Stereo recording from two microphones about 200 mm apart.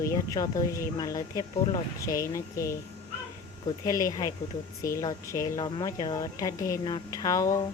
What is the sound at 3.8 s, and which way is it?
Speech, 15° left (ahead or behind).